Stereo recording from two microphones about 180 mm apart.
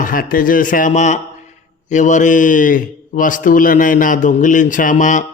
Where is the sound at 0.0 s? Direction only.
50° left (ahead or behind).